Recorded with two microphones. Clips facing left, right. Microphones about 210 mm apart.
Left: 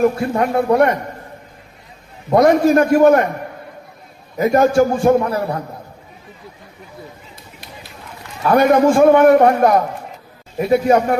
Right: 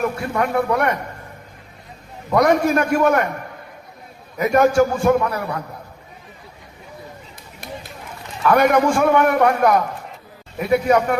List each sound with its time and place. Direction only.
0.0 s a man's voice: 30° left (ahead or behind)
2.3 s a man's voice: 30° left (ahead or behind)
4.4 s a man's voice: 30° left (ahead or behind)
8.4 s a man's voice: 30° left (ahead or behind)